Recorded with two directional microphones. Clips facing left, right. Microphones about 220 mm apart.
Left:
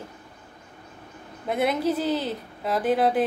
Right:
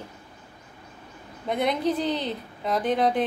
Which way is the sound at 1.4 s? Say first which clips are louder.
Left 1 dB; 5° left (ahead or behind).